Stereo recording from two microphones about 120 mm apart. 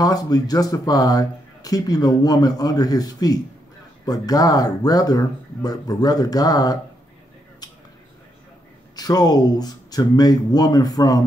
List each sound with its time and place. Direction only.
0.0 s speech: 30° left (ahead or behind)
8.9 s speech: 30° left (ahead or behind)